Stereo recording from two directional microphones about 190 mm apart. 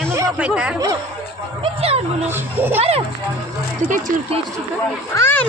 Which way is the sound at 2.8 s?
30° right (ahead or behind).